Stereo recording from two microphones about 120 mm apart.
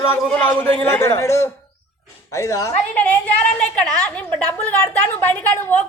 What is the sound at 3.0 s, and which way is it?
A woman's voice, 10° left (ahead or behind).